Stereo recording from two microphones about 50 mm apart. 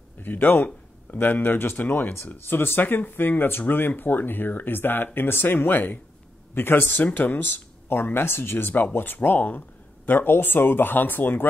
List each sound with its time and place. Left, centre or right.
0.2 s speech: left